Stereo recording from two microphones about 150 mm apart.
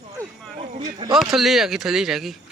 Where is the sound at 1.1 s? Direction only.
Centre (ahead or behind).